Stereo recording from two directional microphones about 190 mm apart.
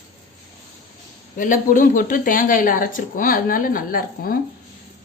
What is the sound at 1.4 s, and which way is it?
Speech, 45° left (ahead or behind).